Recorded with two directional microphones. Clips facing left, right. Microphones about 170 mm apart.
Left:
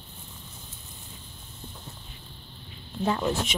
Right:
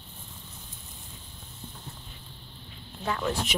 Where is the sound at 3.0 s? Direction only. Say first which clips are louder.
Left 3 dB; 25° left (ahead or behind).